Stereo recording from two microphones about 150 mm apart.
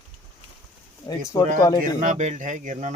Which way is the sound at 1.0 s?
25° left (ahead or behind).